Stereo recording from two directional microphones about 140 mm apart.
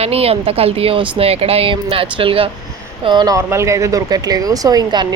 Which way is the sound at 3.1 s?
30° right (ahead or behind).